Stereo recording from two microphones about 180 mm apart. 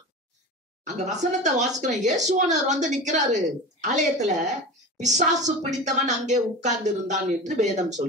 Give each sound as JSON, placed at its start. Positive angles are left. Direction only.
{"t": 0.8, "sound": "a woman's voice", "side_deg": -40}